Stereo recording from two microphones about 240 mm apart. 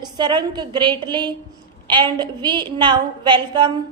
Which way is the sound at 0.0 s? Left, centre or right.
Centre.